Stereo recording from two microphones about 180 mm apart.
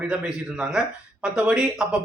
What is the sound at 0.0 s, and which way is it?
Speech, 5° right (ahead or behind).